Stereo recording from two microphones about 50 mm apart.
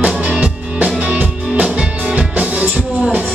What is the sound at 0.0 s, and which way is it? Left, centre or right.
Music, right.